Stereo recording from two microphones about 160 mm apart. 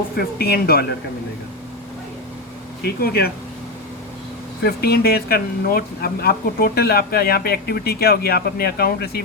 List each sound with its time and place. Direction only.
0.2 s speech: 75° left (ahead or behind)
2.8 s speech: 80° left
4.6 s speech: 75° left (ahead or behind)